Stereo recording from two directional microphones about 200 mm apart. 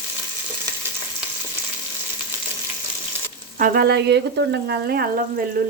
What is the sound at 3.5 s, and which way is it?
Speech, 45° right (ahead or behind).